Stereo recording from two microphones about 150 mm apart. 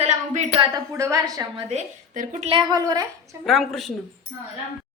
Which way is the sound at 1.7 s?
55° right (ahead or behind).